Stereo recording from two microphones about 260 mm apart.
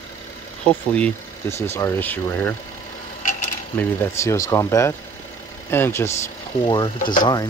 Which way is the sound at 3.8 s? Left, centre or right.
Centre.